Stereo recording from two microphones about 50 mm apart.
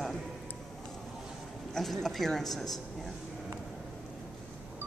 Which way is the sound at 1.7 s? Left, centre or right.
Centre.